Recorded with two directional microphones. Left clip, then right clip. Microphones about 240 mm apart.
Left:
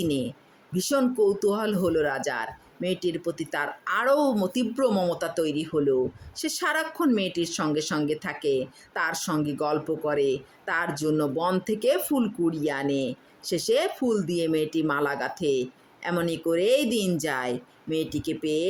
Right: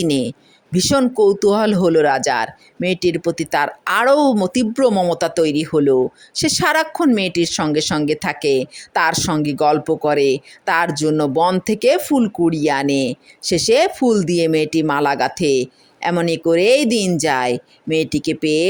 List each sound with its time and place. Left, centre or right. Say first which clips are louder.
0.0 s speech: right 9 dB; right